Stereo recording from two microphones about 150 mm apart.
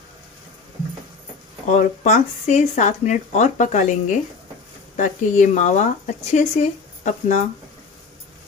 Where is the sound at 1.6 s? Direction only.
55° left (ahead or behind).